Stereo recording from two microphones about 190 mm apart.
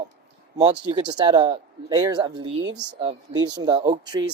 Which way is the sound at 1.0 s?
20° right (ahead or behind).